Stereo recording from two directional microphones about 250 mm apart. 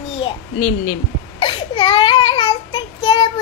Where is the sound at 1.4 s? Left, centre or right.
Centre.